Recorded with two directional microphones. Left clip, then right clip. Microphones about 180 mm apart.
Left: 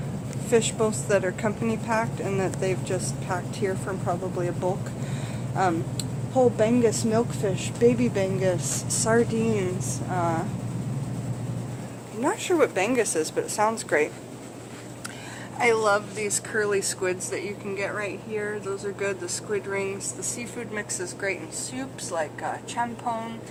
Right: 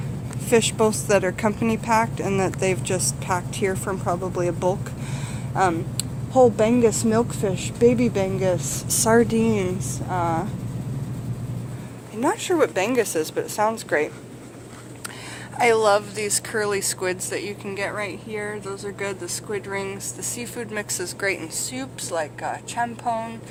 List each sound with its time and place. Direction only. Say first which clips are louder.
0.5 s speech: right 4 dB; 50° right (ahead or behind)
12.2 s a woman's voice: right 2 dB; 30° right (ahead or behind)
15.5 s speech: right 4 dB; 50° right (ahead or behind)